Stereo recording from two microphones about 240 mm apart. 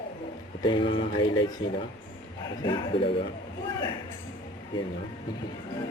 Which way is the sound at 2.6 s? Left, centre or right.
Centre.